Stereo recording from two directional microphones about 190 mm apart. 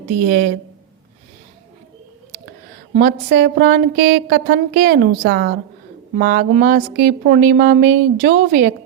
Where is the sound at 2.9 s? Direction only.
45° right (ahead or behind).